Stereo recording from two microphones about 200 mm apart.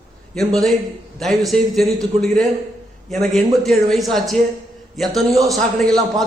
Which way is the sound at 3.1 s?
Centre (ahead or behind).